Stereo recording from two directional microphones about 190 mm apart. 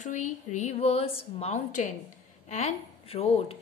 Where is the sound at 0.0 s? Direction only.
40° left (ahead or behind).